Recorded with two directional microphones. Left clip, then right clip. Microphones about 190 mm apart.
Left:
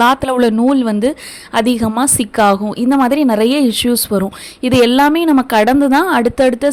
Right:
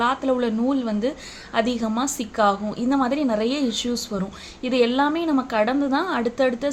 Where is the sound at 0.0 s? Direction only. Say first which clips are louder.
Left 10 dB; 50° left (ahead or behind).